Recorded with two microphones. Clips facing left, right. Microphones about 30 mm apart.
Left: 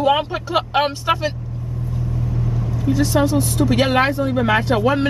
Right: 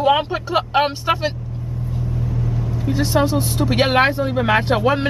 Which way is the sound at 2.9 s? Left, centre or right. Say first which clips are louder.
Left 1 dB; right.